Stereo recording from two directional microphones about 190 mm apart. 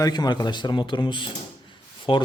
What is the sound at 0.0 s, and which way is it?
Speech, 20° left (ahead or behind).